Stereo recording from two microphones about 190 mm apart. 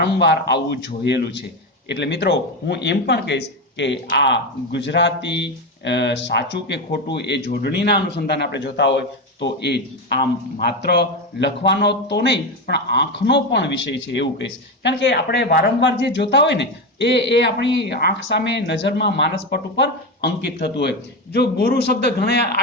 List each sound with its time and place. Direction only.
0.0 s speech: 60° left (ahead or behind)